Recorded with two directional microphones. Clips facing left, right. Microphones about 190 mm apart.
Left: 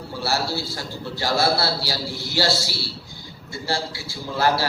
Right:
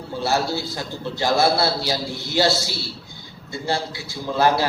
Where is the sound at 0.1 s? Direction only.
20° right (ahead or behind).